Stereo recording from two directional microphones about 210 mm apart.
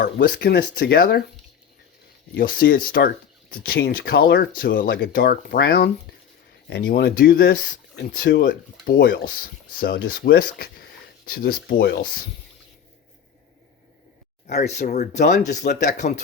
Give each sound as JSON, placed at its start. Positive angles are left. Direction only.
{"t": 0.0, "sound": "speech", "side_deg": 50}
{"t": 2.3, "sound": "speech", "side_deg": 45}
{"t": 14.4, "sound": "speech", "side_deg": 35}